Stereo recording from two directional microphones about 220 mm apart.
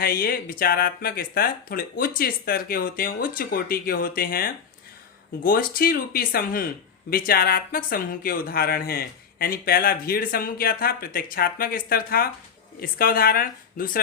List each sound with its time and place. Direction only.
0.0 s speech: 45° left (ahead or behind)